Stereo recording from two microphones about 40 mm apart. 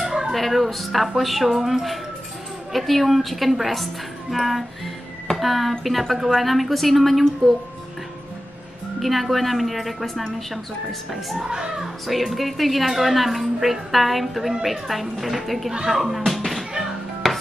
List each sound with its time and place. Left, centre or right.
0.0 s music: centre
0.3 s speech: centre
9.0 s speech: centre
11.4 s speech: centre
12.1 s speech: centre
16.3 s music: centre